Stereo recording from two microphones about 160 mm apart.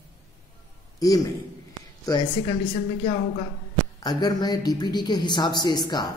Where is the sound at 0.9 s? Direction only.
20° left (ahead or behind).